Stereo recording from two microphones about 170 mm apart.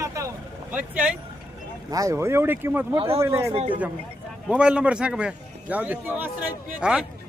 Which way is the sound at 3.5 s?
35° right (ahead or behind).